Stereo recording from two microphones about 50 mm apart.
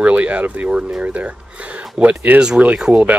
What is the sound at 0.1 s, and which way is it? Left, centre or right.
Speech, right.